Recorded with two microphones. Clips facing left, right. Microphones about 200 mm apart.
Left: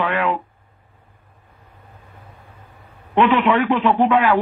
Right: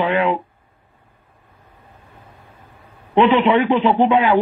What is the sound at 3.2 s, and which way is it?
A man's voice, 25° right (ahead or behind).